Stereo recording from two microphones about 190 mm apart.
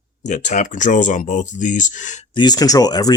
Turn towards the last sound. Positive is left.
turn(degrees=20)  # may be behind; listen again after turning